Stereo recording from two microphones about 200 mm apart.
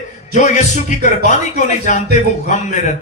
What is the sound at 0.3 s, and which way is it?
A man's voice, 35° left (ahead or behind).